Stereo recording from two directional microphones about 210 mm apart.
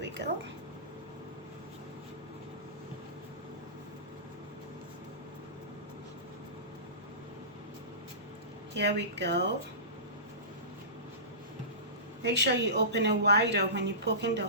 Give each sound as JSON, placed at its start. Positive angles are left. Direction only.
{"t": 8.7, "sound": "speech", "side_deg": -55}
{"t": 12.2, "sound": "speech", "side_deg": -55}